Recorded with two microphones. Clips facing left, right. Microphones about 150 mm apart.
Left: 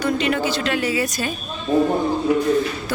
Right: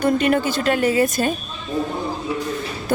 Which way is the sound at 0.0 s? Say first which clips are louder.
Right 3 dB; 50° right (ahead or behind).